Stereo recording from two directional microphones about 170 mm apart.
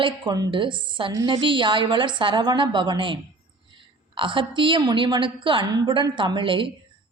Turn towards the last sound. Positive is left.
turn(degrees=-30)  # may be behind; listen again after turning